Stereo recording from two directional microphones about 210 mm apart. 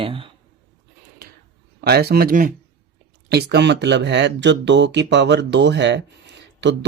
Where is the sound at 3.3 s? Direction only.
50° right (ahead or behind).